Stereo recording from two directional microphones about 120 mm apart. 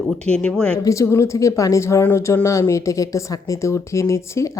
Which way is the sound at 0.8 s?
25° left (ahead or behind).